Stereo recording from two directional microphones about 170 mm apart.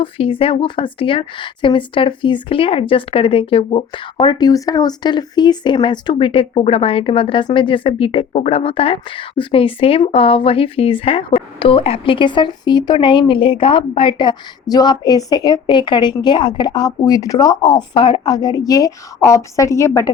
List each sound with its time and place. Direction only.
0.0 s a woman's voice: 30° left (ahead or behind)